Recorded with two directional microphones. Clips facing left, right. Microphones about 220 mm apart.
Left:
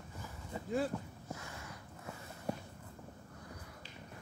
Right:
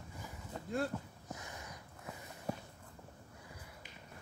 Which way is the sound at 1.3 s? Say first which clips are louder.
Right 1 dB; 15° right (ahead or behind).